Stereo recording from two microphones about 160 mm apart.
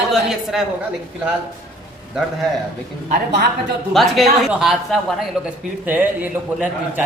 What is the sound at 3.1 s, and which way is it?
Speech, 90° right.